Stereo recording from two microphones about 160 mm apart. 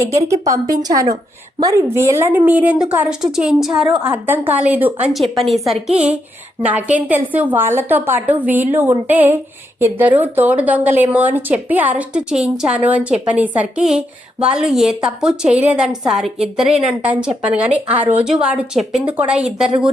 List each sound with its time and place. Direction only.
0.1 s a woman's voice: 20° right (ahead or behind)